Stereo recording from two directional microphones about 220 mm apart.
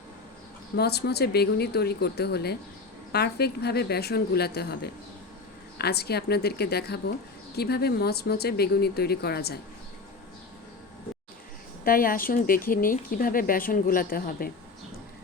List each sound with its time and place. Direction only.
0.8 s speech: 45° left (ahead or behind)
11.9 s speech: 40° left (ahead or behind)